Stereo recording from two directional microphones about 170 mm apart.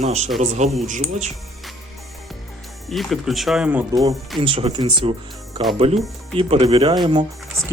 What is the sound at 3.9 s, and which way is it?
Speech, 20° right (ahead or behind).